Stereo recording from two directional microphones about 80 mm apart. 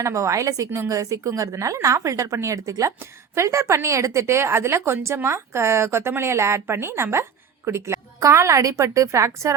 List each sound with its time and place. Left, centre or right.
0.0 s a woman's voice: right